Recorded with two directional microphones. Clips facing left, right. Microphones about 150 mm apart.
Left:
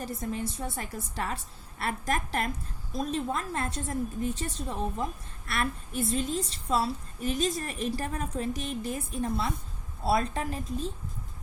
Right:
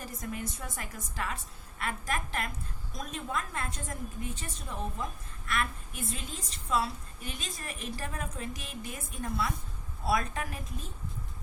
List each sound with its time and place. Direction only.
0.0 s a woman's voice: 30° left (ahead or behind)